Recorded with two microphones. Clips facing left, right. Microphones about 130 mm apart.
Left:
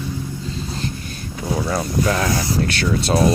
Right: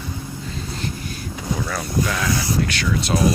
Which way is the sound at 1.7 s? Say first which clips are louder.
Left 5 dB; 35° left (ahead or behind).